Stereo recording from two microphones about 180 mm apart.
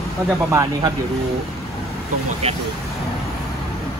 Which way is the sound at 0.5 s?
20° right (ahead or behind).